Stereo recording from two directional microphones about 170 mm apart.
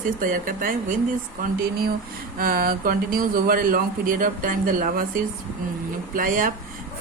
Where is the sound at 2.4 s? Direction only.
60° right (ahead or behind).